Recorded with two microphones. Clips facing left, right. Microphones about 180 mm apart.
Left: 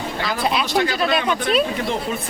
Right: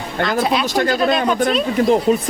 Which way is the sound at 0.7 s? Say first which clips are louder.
Right 3 dB; 45° right (ahead or behind).